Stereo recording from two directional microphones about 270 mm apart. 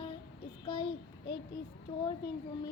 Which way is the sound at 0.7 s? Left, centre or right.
Centre.